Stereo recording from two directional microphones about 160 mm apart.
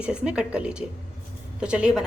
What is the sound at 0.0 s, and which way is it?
A woman's voice, 5° right (ahead or behind).